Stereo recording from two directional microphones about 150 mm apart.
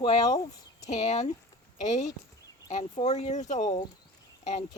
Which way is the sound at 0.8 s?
50° left (ahead or behind).